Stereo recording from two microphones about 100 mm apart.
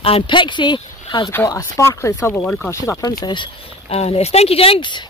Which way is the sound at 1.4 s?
30° left (ahead or behind).